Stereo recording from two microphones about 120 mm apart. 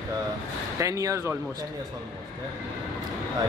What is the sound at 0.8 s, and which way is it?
Speech, 25° right (ahead or behind).